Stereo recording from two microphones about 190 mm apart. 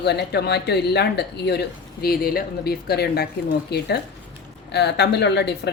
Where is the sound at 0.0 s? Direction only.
60° left (ahead or behind).